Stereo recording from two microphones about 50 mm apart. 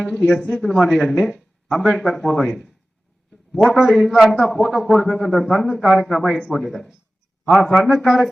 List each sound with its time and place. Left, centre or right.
0.0 s speech: centre
0.7 s a man's voice: centre